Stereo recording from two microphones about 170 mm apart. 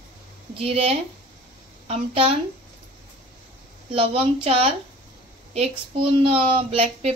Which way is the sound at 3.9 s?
35° right (ahead or behind).